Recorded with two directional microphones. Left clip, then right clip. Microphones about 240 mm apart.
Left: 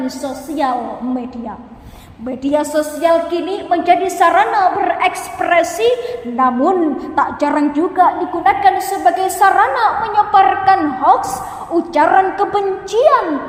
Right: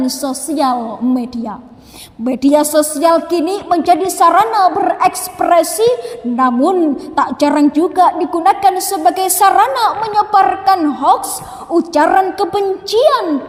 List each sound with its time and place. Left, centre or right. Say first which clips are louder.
0.0 s a woman's voice: right 4 dB; right